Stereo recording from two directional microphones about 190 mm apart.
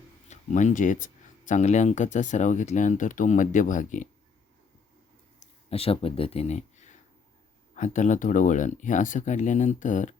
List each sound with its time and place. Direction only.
0.3 s speech: 40° left (ahead or behind)
5.6 s speech: 30° left (ahead or behind)